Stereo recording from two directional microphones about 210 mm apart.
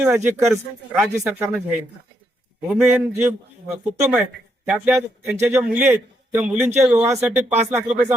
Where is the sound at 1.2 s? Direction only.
5° right (ahead or behind).